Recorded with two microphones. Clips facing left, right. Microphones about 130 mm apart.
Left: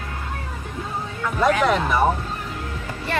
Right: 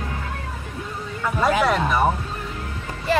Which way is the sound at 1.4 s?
5° right (ahead or behind).